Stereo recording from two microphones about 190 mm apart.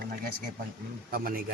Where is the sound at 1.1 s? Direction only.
50° right (ahead or behind).